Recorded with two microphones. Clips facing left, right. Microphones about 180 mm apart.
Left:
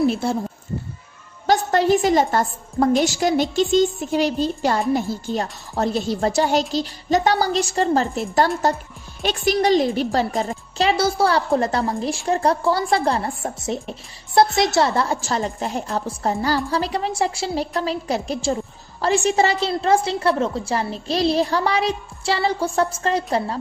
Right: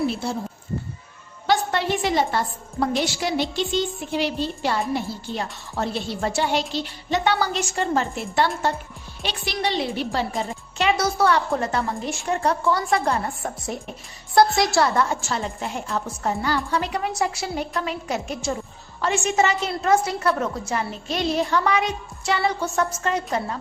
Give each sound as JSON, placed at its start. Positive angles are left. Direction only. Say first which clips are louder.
{"t": 1.5, "sound": "a woman's voice", "louder": "left 5 dB", "side_deg": 40}